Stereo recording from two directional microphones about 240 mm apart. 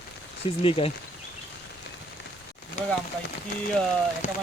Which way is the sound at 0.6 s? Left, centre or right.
Left.